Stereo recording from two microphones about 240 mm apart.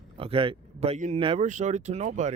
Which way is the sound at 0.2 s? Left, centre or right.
Right.